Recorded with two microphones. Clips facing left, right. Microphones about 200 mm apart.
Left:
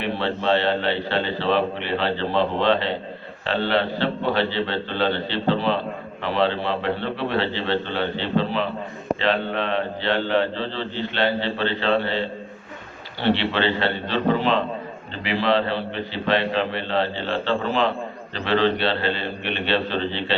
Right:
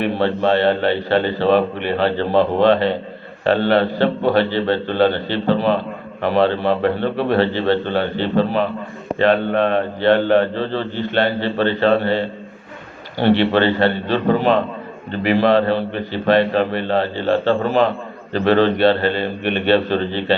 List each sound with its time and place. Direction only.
0.0 s mantra: 45° right (ahead or behind)